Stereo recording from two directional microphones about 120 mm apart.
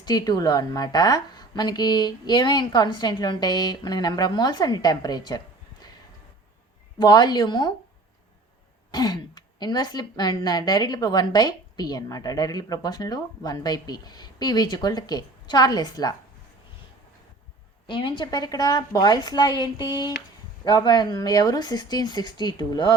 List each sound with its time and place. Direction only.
0.0 s speech: 35° left (ahead or behind)
7.0 s speech: 35° left (ahead or behind)
8.9 s speech: 35° left (ahead or behind)
17.8 s speech: 45° left (ahead or behind)